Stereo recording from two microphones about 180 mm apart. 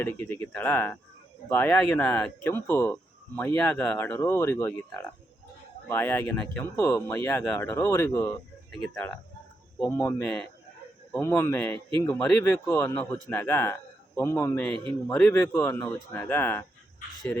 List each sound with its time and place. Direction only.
0.0 s speech: 15° left (ahead or behind)
9.8 s speech: 15° left (ahead or behind)